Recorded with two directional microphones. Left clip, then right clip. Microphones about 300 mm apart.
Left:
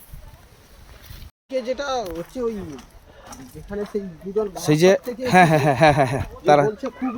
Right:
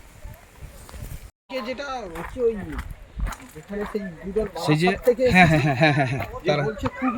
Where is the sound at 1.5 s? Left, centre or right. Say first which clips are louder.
Left 5 dB; left.